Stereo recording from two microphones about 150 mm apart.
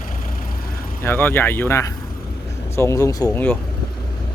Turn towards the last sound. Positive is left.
turn(degrees=10)  # may be behind; listen again after turning